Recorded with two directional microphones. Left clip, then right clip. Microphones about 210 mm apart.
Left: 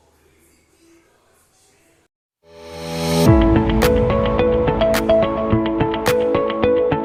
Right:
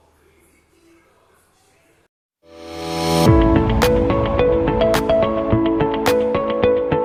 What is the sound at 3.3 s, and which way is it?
Music, centre (ahead or behind).